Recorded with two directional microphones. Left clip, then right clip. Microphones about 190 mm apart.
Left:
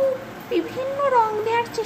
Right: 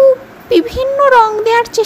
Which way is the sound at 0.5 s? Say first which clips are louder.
Right 12 dB; 40° right (ahead or behind).